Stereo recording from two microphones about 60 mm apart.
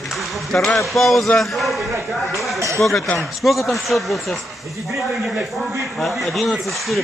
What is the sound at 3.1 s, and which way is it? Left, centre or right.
Speech, centre.